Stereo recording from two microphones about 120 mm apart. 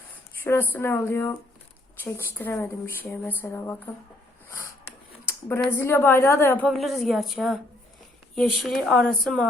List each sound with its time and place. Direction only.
0.4 s speech: 15° left (ahead or behind)
5.7 s speech: 20° left (ahead or behind)
6.7 s speech: centre (ahead or behind)